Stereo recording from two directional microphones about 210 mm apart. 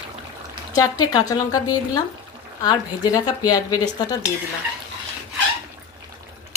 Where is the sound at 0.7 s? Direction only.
15° left (ahead or behind).